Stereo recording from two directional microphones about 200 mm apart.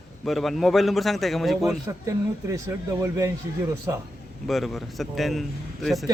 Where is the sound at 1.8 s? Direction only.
15° right (ahead or behind).